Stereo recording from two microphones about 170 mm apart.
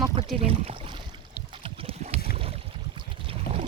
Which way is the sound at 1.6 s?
35° right (ahead or behind).